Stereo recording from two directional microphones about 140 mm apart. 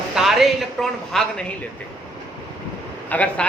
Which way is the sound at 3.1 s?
10° left (ahead or behind).